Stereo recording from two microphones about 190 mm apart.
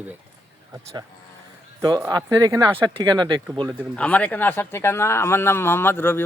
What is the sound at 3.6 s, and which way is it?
Speech, 5° left (ahead or behind).